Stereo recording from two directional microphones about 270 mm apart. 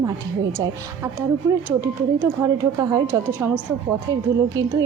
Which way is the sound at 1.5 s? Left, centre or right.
Centre.